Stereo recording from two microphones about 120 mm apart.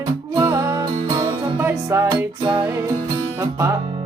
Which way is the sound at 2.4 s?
40° right (ahead or behind).